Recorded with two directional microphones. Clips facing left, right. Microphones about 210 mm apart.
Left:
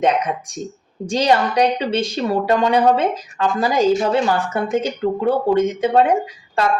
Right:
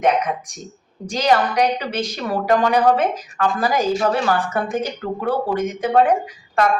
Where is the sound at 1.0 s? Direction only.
30° left (ahead or behind).